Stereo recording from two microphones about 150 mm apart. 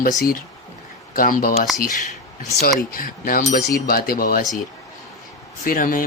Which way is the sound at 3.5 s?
85° left.